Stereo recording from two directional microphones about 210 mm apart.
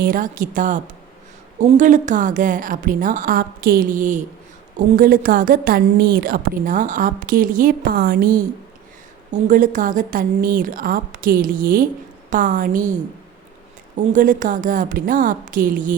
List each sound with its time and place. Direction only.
0.0 s a woman's voice: 40° right (ahead or behind)
14.1 s a woman's voice: 40° right (ahead or behind)